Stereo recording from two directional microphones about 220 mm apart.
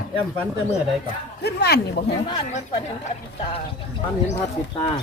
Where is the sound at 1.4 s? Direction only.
45° left (ahead or behind).